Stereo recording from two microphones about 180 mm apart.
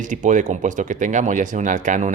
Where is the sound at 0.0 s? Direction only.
45° right (ahead or behind).